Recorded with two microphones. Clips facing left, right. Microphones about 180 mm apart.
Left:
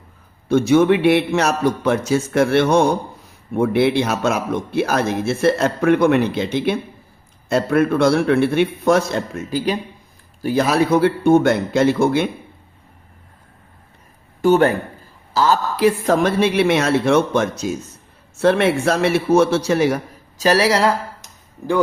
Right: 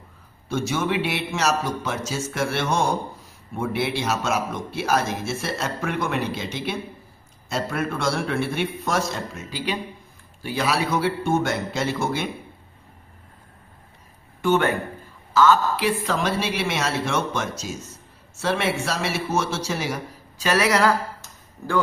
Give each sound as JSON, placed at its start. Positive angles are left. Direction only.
{"t": 0.4, "sound": "speech", "side_deg": 60}
{"t": 14.4, "sound": "speech", "side_deg": 35}
{"t": 20.4, "sound": "speech", "side_deg": 35}
{"t": 21.6, "sound": "speech", "side_deg": 15}